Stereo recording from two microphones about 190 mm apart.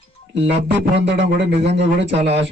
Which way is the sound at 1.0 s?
65° right (ahead or behind).